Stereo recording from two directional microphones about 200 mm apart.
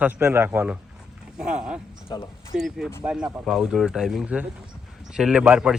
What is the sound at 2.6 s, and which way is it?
Speech, centre (ahead or behind).